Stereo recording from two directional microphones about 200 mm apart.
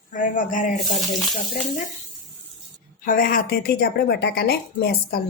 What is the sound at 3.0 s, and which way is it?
A woman's voice, 45° left (ahead or behind).